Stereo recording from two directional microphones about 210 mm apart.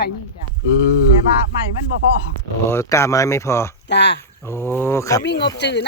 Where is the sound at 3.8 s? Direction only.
55° left (ahead or behind).